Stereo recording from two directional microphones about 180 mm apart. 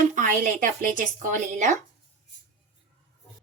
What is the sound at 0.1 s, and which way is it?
Speech, 45° right (ahead or behind).